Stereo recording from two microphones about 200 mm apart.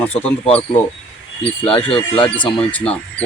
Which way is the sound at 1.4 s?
5° left (ahead or behind).